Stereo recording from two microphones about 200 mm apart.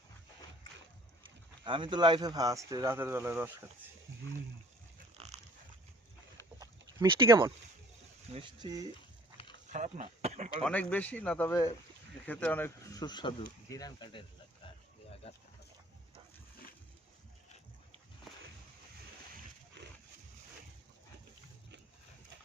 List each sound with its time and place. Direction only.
1.6 s speech: 25° right (ahead or behind)
5.1 s pig: 30° right (ahead or behind)
6.6 s a sound: 20° right (ahead or behind)
8.3 s speech: 25° right (ahead or behind)
9.6 s speech: 35° right (ahead or behind)
10.6 s speech: 5° left (ahead or behind); by 14.3 s 25° left (ahead or behind)